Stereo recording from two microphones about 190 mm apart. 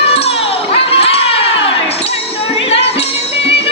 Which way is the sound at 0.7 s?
30° left (ahead or behind).